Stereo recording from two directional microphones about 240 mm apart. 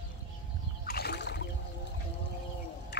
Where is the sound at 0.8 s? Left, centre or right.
Left.